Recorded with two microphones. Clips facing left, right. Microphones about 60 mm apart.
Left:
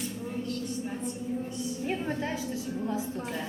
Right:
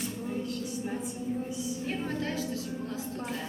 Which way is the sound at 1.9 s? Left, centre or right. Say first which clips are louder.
Left 2 dB; centre.